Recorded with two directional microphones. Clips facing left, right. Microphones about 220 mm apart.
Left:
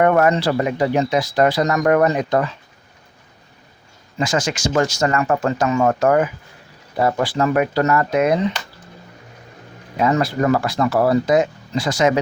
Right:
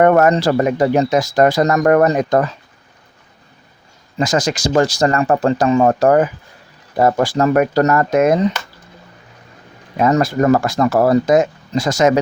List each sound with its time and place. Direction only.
0.0 s speech: 45° right (ahead or behind)
4.2 s speech: 40° right (ahead or behind)
10.0 s speech: 45° right (ahead or behind)